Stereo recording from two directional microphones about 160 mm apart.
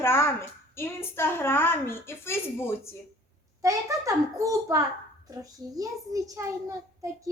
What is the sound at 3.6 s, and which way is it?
A woman's voice, 20° right (ahead or behind).